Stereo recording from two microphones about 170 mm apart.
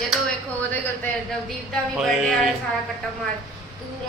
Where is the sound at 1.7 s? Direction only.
Centre (ahead or behind).